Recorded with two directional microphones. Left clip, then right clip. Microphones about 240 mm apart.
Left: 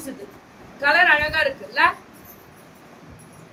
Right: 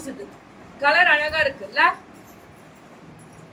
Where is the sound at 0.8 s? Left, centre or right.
Centre.